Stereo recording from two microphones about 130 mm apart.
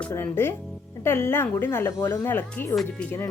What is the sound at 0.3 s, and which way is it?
Speech, 20° left (ahead or behind).